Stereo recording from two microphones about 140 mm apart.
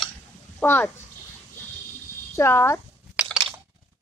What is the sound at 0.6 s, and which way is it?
Speech, 10° left (ahead or behind).